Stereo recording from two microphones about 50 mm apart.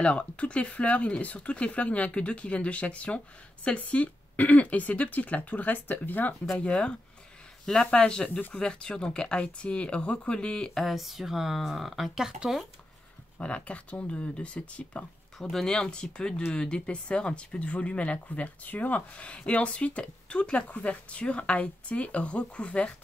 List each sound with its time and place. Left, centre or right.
0.0 s speech: left
6.5 s speech: centre
10.7 s speech: centre
13.4 s speech: left
15.3 s speech: centre; by 19.0 s left
19.1 s speech: left